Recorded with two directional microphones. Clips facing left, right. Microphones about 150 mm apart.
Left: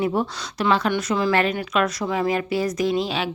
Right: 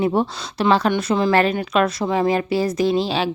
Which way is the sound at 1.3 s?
35° right (ahead or behind).